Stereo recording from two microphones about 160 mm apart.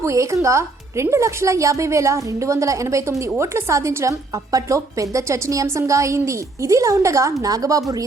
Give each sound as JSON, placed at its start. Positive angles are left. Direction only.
{"t": 0.0, "sound": "a woman's voice", "side_deg": -20}